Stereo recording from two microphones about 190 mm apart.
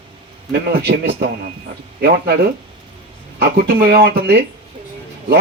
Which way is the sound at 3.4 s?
55° right (ahead or behind).